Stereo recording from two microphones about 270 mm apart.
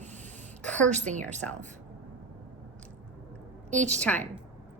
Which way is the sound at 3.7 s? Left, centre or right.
Right.